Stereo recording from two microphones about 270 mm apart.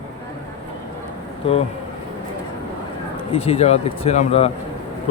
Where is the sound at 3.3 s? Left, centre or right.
Left.